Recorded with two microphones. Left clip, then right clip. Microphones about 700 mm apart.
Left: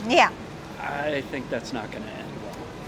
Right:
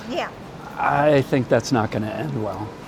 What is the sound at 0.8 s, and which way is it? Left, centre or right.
Speech, right.